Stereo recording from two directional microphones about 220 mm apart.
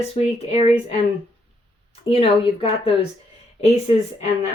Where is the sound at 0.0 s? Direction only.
25° left (ahead or behind).